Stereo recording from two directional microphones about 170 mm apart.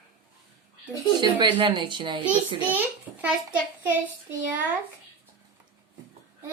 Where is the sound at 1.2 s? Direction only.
25° right (ahead or behind).